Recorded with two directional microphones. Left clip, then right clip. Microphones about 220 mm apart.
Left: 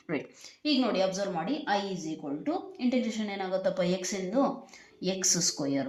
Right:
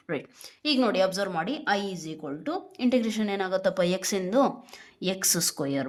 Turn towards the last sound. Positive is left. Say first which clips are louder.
# right 1 dB
turn(degrees=-50)  # may be behind; listen again after turning